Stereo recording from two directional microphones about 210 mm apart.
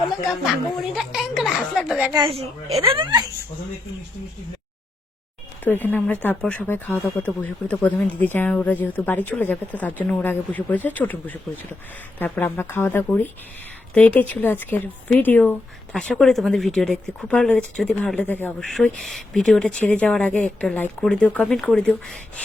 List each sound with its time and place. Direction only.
0.9 s speech: centre (ahead or behind)
2.1 s speech: 25° right (ahead or behind)
5.6 s speech: 10° left (ahead or behind)